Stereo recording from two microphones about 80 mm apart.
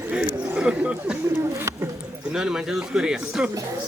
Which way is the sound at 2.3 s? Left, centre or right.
Centre.